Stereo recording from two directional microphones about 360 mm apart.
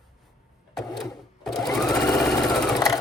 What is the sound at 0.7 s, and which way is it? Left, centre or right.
Sewing machine, centre.